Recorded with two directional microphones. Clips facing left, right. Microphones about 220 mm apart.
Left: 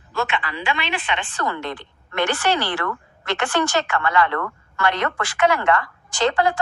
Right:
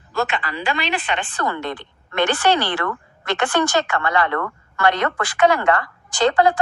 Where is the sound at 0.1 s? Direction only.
40° right (ahead or behind).